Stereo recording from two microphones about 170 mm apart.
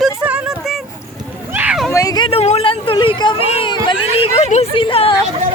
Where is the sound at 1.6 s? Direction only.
5° right (ahead or behind).